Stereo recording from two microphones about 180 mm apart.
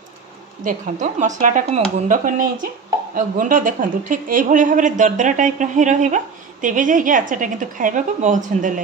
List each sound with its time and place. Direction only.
0.7 s a woman's voice: 45° right (ahead or behind)